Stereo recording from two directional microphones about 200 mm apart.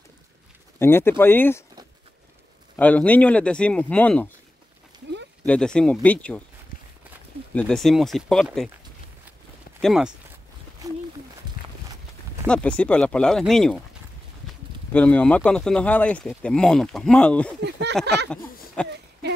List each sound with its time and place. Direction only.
0.7 s speech: 10° left (ahead or behind)
2.7 s speech: 5° left (ahead or behind)
5.4 s speech: 5° left (ahead or behind)
7.5 s speech: 5° left (ahead or behind)
9.8 s speech: centre (ahead or behind)
11.4 s a sound: 20° right (ahead or behind)
12.4 s speech: 5° left (ahead or behind)
14.9 s speech: 5° left (ahead or behind)
17.6 s speech: 60° right (ahead or behind)
18.8 s speech: 5° left (ahead or behind)